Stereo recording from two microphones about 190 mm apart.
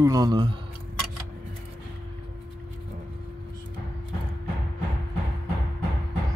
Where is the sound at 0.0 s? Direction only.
20° right (ahead or behind).